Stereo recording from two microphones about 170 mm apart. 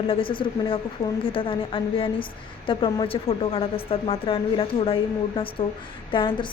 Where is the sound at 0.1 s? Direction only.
30° left (ahead or behind).